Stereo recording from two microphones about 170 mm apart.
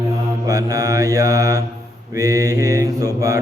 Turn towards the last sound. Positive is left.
turn(degrees=-20)  # may be behind; listen again after turning